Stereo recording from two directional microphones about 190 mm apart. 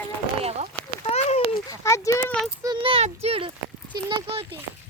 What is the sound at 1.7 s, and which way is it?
Speech, 15° left (ahead or behind).